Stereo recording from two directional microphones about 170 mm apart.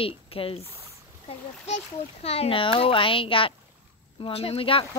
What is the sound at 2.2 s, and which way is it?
A woman's voice, 35° left (ahead or behind).